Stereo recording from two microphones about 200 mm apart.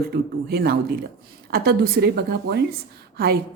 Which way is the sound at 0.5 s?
50° right (ahead or behind).